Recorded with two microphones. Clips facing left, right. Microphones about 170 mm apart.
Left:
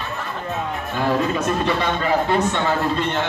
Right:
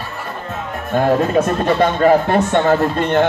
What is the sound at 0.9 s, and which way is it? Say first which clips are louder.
Speech: right 7 dB; 50° right (ahead or behind).